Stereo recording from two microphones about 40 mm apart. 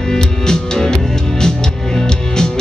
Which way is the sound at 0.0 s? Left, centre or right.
Centre.